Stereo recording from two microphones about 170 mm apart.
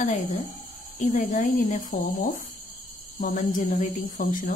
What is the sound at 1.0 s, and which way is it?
Speech, 45° left (ahead or behind).